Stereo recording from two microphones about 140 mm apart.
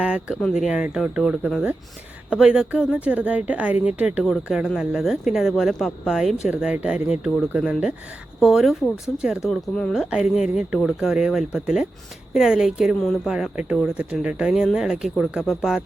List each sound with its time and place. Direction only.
0.0 s speech: 5° right (ahead or behind)
8.8 s speech: 20° left (ahead or behind)
9.5 s speech: 5° left (ahead or behind)